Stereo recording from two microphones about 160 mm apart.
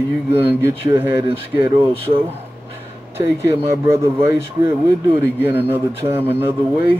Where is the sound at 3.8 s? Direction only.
15° right (ahead or behind).